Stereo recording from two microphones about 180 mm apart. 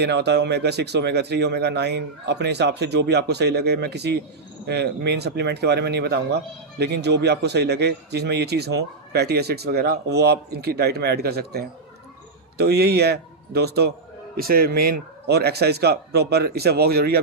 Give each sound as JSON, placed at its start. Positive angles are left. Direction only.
{"t": 0.0, "sound": "a man's voice", "side_deg": -70}